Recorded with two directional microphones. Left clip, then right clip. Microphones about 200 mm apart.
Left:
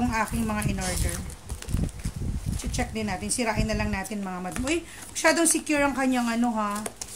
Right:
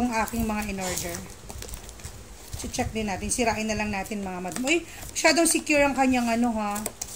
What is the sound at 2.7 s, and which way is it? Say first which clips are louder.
A woman's voice: right 1 dB; 35° left (ahead or behind).